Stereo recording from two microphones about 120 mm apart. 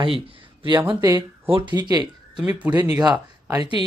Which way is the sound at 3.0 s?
30° right (ahead or behind).